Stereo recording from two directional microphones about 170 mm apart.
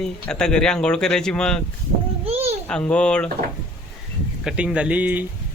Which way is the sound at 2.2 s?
35° right (ahead or behind).